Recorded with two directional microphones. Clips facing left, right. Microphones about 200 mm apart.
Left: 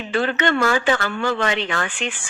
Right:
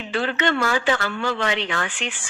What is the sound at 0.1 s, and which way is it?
A woman's voice, 50° left (ahead or behind).